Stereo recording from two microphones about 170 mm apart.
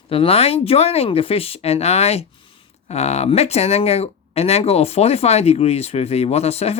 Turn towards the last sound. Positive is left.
turn(degrees=40)  # may be behind; listen again after turning